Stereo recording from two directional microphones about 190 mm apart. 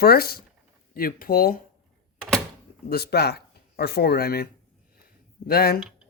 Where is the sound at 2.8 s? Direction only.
55° left (ahead or behind).